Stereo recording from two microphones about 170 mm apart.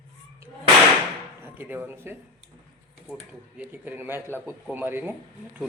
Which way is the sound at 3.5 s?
10° right (ahead or behind).